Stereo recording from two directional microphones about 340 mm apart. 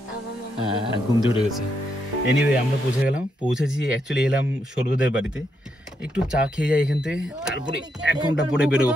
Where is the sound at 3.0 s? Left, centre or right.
Centre.